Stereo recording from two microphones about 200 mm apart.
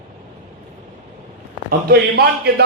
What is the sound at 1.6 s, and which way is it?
Speech, 50° right (ahead or behind).